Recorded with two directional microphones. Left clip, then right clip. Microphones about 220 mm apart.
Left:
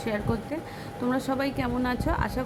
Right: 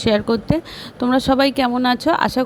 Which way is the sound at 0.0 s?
35° right (ahead or behind).